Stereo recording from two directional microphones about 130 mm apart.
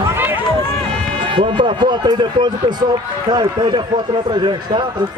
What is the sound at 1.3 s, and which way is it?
Speech, 40° right (ahead or behind).